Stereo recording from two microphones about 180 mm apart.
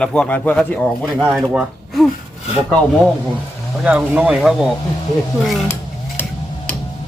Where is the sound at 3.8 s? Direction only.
5° right (ahead or behind).